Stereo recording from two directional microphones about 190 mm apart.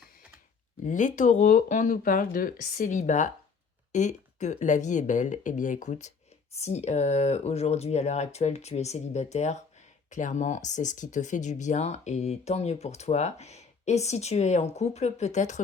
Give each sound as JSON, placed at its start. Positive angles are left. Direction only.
{"t": 0.9, "sound": "speech", "side_deg": 40}